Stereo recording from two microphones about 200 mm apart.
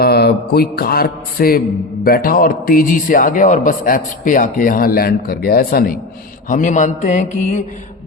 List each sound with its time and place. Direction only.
0.0 s mantra: 55° left (ahead or behind)
2.0 s a man's voice: 45° left (ahead or behind)
6.5 s mantra: 40° left (ahead or behind)